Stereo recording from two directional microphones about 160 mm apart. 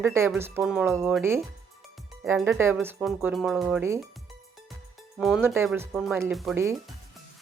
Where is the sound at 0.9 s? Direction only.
15° right (ahead or behind).